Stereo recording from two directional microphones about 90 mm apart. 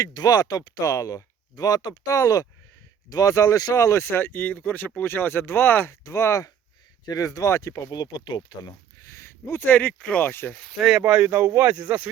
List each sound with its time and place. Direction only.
0.0 s speech: 45° left (ahead or behind)
7.9 s speech: 50° left (ahead or behind)
9.2 s speech: 25° left (ahead or behind)
10.7 s speech: centre (ahead or behind)
11.0 s speech: 15° right (ahead or behind)
11.3 s speech: 30° right (ahead or behind)